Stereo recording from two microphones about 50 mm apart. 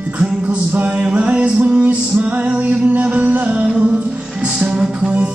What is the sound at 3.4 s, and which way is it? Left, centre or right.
Music, centre.